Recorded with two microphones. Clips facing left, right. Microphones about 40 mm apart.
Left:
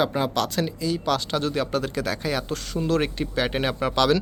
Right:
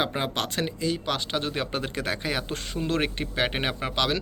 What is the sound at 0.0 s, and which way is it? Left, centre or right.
Speech, right.